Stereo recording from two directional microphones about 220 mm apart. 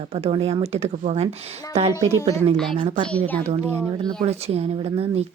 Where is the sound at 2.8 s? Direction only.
25° right (ahead or behind).